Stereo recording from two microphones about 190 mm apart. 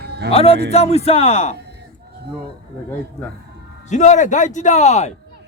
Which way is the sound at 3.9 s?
40° left (ahead or behind).